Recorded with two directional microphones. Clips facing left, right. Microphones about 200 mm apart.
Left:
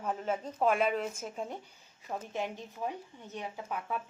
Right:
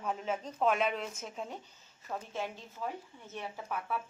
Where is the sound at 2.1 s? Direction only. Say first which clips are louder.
Left 2 dB; 15° left (ahead or behind).